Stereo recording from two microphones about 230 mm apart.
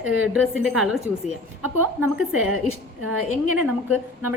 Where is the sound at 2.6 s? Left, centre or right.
Right.